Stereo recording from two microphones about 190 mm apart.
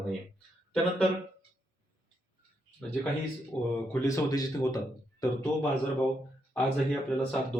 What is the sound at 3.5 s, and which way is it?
A man's voice, 10° left (ahead or behind).